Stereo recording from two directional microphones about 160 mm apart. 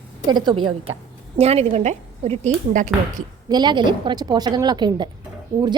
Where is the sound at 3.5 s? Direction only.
30° right (ahead or behind).